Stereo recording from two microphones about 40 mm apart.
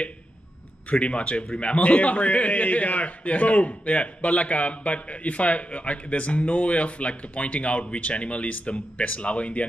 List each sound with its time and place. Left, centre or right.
0.9 s a man's voice: left